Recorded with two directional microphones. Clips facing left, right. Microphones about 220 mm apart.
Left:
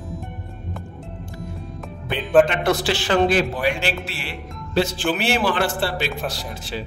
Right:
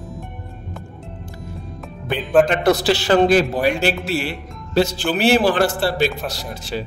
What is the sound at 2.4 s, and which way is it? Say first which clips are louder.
Speech: right 4 dB; 40° right (ahead or behind).